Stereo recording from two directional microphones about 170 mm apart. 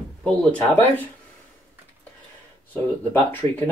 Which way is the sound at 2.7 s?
10° left (ahead or behind).